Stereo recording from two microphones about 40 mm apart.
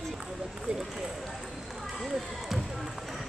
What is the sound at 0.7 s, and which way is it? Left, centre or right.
Run, right.